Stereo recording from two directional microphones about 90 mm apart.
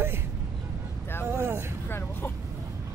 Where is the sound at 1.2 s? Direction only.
25° right (ahead or behind).